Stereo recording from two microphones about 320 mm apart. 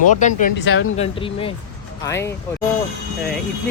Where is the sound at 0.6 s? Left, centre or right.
Left.